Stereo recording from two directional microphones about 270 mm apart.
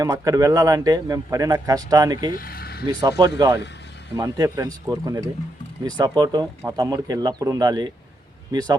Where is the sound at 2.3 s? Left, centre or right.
Left.